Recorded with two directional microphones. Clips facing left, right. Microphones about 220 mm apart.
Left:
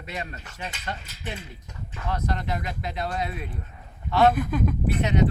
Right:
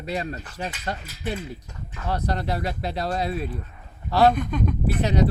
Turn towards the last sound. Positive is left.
turn(degrees=-35)  # may be behind; listen again after turning